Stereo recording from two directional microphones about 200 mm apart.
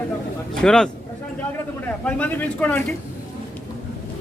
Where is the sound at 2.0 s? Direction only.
5° left (ahead or behind).